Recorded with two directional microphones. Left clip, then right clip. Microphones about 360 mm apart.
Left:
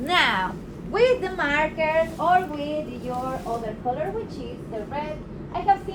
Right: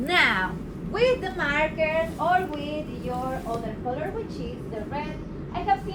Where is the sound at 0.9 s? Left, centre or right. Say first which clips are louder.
Left 3 dB; left.